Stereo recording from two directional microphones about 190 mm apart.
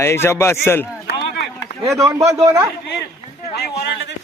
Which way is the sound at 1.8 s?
15° right (ahead or behind).